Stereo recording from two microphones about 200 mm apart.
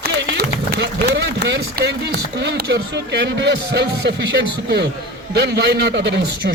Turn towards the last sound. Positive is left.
turn(degrees=-60)  # may be behind; listen again after turning